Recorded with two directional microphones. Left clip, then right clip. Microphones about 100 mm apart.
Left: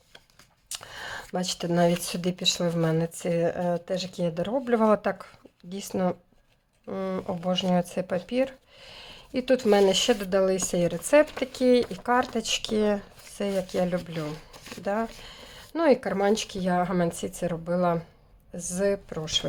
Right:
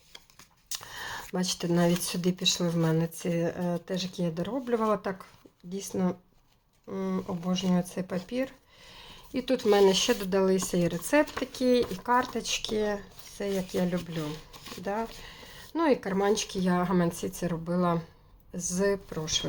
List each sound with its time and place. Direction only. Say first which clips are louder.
0.7 s a sound: left 1 dB; 30° left (ahead or behind)
1.4 s speech: left 4 dB; 25° left (ahead or behind)
11.1 s speech: left 6 dB; 35° left (ahead or behind)
14.3 s speech: left 2 dB; 25° left (ahead or behind)